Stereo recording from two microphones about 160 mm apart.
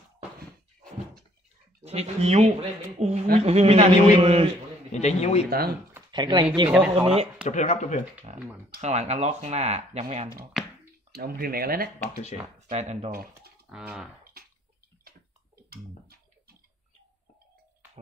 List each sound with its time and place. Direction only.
1.8 s a man's voice: 40° right (ahead or behind)
4.9 s speech: 45° left (ahead or behind)
6.1 s speech: 25° right (ahead or behind)
6.9 s a man's voice: 40° right (ahead or behind)
7.4 s speech: 45° left (ahead or behind)
8.8 s speech: 45° right (ahead or behind)
10.6 s a sound: centre (ahead or behind)
11.1 s speech: 70° right (ahead or behind)
12.5 s speech: 45° right (ahead or behind)
13.1 s speech: 70° right (ahead or behind)
13.7 s speech: 5° right (ahead or behind)
15.0 s a sound: 70° right (ahead or behind)